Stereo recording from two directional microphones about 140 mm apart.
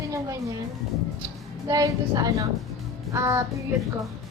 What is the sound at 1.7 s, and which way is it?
A woman's voice, 25° right (ahead or behind).